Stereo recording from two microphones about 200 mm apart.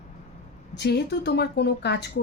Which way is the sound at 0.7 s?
55° left (ahead or behind).